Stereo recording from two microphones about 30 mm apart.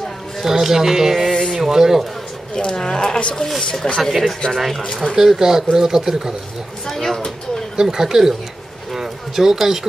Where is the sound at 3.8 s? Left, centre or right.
Left.